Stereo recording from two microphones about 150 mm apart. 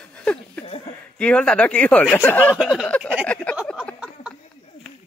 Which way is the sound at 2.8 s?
5° left (ahead or behind).